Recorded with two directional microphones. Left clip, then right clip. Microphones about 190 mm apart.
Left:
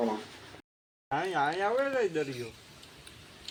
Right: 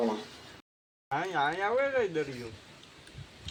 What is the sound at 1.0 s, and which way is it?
Speech, 45° left (ahead or behind).